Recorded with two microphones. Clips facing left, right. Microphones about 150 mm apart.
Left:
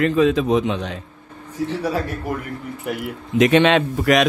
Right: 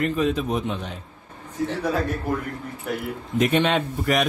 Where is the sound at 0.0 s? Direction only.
90° left.